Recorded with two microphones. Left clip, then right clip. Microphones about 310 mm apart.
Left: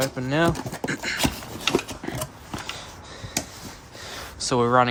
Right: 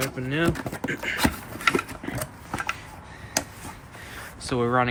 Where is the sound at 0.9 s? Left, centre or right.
Left.